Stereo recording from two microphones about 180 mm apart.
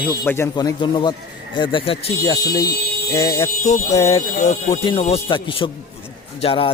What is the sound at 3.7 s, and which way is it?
Speech, 40° left (ahead or behind).